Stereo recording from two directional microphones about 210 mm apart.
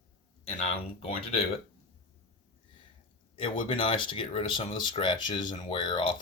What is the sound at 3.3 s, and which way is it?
Speech, 25° left (ahead or behind).